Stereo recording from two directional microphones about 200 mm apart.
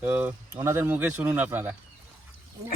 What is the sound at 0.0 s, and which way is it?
Speech, 10° right (ahead or behind).